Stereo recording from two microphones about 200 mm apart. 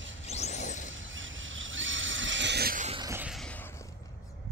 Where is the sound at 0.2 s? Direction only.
35° left (ahead or behind).